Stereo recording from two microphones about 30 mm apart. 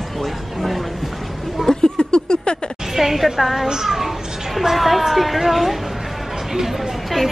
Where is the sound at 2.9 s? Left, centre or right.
Centre.